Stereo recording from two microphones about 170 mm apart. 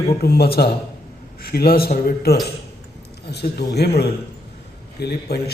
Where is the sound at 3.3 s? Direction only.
75° left (ahead or behind).